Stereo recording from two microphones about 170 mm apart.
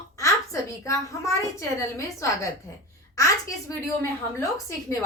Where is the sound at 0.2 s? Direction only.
20° left (ahead or behind).